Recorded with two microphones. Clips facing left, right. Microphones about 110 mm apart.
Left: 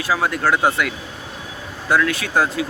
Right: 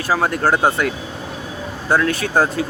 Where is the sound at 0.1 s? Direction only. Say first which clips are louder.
Right 2 dB; 45° right (ahead or behind).